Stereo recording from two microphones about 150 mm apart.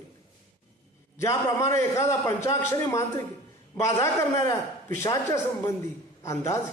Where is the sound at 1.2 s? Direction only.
20° left (ahead or behind).